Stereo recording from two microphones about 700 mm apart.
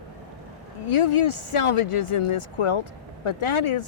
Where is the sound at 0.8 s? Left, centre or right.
Left.